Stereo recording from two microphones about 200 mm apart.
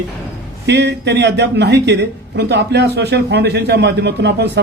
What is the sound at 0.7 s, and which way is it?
Speech, 60° right (ahead or behind).